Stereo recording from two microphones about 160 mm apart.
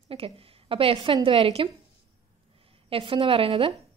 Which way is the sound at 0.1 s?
35° right (ahead or behind).